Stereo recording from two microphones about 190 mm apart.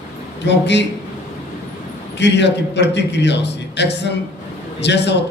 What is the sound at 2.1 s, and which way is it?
A man's voice, 65° left (ahead or behind).